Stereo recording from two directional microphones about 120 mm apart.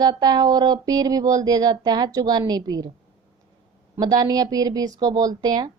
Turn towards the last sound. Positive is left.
turn(degrees=-30)  # may be behind; listen again after turning